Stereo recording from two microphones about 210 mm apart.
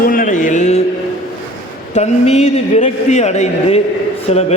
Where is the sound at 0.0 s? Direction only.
40° left (ahead or behind).